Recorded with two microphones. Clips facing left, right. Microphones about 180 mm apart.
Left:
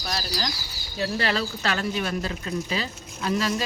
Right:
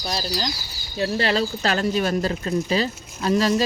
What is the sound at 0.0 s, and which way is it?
Speech, 30° right (ahead or behind).